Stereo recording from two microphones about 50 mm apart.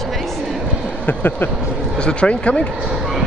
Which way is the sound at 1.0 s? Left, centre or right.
Left.